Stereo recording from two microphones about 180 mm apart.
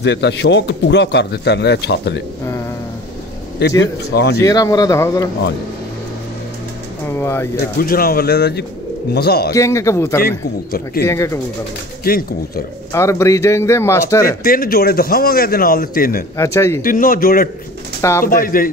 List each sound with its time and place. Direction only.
0.0 s speech: 70° left (ahead or behind)
3.8 s speech: 70° left (ahead or behind)
4.4 s a man's voice: 20° left (ahead or behind)
7.1 s speech: 15° left (ahead or behind)
7.8 s a man's voice: 55° left (ahead or behind)
9.5 s a man's voice: 15° left (ahead or behind)
10.2 s a man's voice: 55° left (ahead or behind)
11.1 s a man's voice: 15° left (ahead or behind)
12.0 s a man's voice: 55° left (ahead or behind)
12.9 s a man's voice: 15° left (ahead or behind)
14.4 s a man's voice: 55° left (ahead or behind)
16.3 s a man's voice: 15° left (ahead or behind)
16.8 s speech: 50° left (ahead or behind)